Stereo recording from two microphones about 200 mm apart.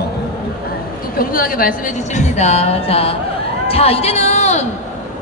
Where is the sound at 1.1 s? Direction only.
45° left (ahead or behind).